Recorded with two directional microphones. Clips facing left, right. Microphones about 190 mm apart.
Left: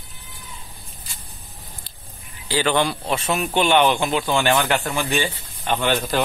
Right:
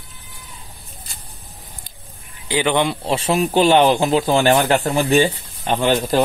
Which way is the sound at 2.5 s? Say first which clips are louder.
Right 2 dB; 20° right (ahead or behind).